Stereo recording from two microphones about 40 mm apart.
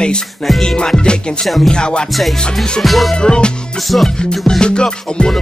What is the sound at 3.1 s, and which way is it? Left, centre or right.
Music, left.